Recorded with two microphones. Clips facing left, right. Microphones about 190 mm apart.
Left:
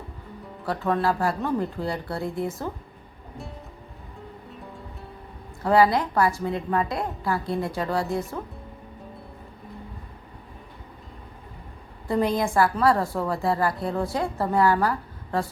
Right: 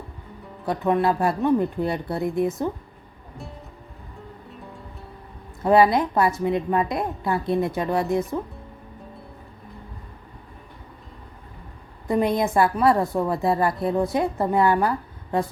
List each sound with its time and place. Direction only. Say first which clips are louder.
0.6 s a woman's voice: right 3 dB; 20° right (ahead or behind)
5.6 s a woman's voice: right 2 dB; 20° right (ahead or behind)
12.0 s a woman's voice: right 2 dB; 20° right (ahead or behind)